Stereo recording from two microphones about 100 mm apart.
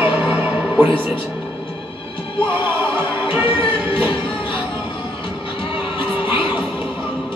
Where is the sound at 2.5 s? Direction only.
20° right (ahead or behind).